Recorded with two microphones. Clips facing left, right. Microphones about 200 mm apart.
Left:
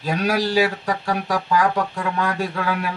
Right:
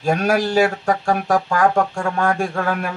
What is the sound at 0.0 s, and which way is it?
Speech, 50° right (ahead or behind).